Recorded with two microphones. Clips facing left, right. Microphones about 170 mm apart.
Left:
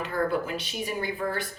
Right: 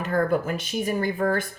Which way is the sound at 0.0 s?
45° right (ahead or behind).